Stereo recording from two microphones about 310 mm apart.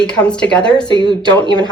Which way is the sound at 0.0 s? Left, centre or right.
Centre.